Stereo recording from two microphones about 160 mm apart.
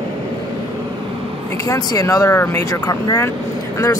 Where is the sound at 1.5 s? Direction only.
20° left (ahead or behind).